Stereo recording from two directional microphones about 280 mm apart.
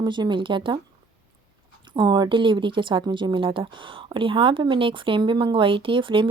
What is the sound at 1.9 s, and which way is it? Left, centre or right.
Speech, centre.